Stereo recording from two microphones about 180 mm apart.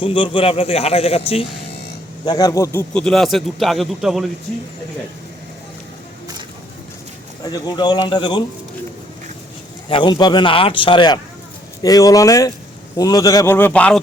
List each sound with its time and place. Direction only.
0.0 s a man's voice: 30° left (ahead or behind)
2.2 s a man's voice: 20° left (ahead or behind)
2.9 s a man's voice: 5° left (ahead or behind)
7.5 s a man's voice: 25° left (ahead or behind)
9.9 s a man's voice: 25° left (ahead or behind); by 14.0 s 5° left (ahead or behind)